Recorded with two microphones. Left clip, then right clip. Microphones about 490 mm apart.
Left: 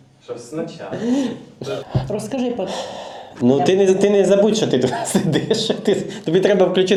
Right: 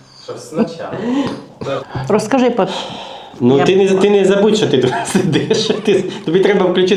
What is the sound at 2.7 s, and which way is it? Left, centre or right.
A man's voice, centre.